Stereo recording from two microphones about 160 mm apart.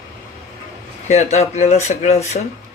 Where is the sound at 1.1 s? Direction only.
45° left (ahead or behind).